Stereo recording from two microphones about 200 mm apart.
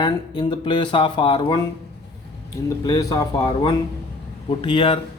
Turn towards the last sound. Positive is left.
turn(degrees=25)  # may be behind; listen again after turning